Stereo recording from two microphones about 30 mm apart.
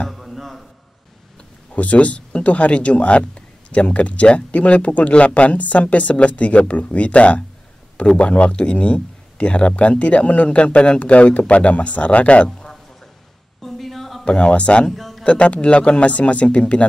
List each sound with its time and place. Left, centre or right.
0.1 s a sound: centre
1.7 s speech: left
13.6 s a sound: centre
14.2 s speech: left
14.9 s speech: centre
15.2 s speech: left